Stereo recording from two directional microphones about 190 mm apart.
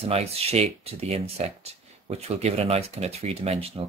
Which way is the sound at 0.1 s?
35° right (ahead or behind).